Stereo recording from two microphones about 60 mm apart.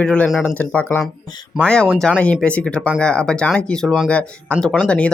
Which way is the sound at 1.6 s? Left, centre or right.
Centre.